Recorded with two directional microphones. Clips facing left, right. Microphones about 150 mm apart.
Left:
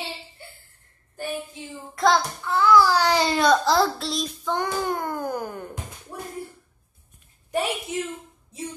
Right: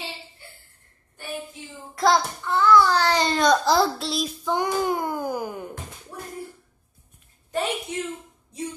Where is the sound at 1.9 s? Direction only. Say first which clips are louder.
Even; centre (ahead or behind).